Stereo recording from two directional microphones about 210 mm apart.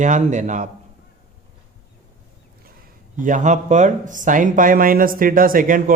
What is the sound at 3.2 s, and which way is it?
Speech, 35° right (ahead or behind).